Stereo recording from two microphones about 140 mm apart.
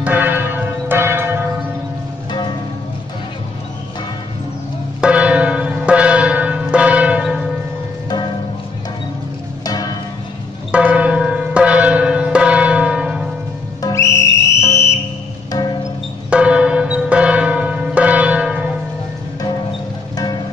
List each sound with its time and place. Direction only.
0.0 s church bell: 10° right (ahead or behind)
5.0 s church bell: 10° right (ahead or behind)
10.7 s church bell: 10° right (ahead or behind)
13.8 s whistle: 20° left (ahead or behind)
16.3 s church bell: 10° right (ahead or behind)